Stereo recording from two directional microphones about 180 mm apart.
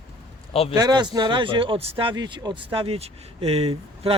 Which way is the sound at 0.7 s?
20° right (ahead or behind).